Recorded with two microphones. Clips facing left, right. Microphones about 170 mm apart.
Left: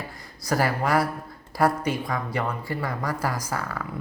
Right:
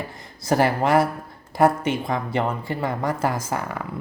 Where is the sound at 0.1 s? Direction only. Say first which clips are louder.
Right 4 dB; 25° right (ahead or behind).